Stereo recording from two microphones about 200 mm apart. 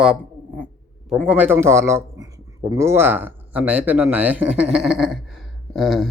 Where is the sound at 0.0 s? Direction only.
5° right (ahead or behind).